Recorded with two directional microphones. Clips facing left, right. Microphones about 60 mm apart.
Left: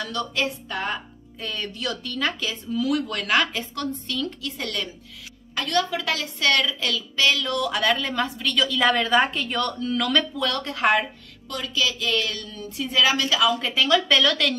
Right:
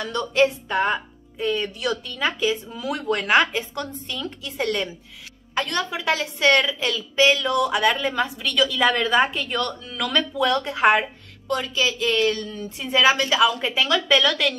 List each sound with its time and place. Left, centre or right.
0.0 s a woman's voice: right; by 10.2 s centre
10.3 s a woman's voice: centre
13.8 s speech: centre